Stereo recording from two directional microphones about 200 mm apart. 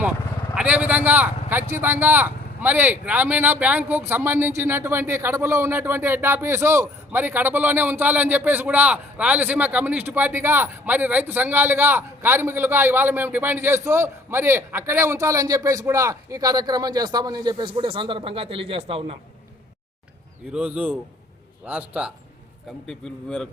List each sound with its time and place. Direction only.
0.5 s a man's voice: 5° right (ahead or behind); by 19.1 s 30° right (ahead or behind)
20.5 s a man's voice: 5° right (ahead or behind)